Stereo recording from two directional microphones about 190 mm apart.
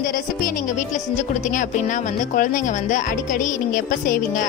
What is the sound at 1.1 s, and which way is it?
A woman's voice, 40° left (ahead or behind).